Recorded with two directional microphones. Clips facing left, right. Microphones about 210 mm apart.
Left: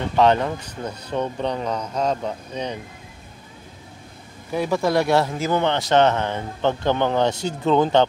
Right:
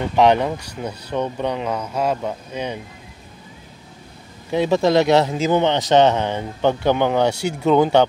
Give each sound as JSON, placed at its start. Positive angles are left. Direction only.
{"t": 0.1, "sound": "speech", "side_deg": -15}
{"t": 4.5, "sound": "a man's voice", "side_deg": -25}